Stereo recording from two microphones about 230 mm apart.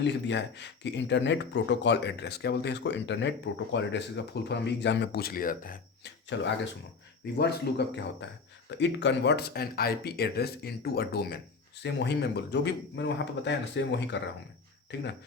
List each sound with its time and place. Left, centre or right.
0.0 s speech: left
6.3 s speech: left